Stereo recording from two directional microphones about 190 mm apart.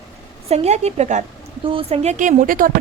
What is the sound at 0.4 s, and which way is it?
A woman's voice, 35° right (ahead or behind).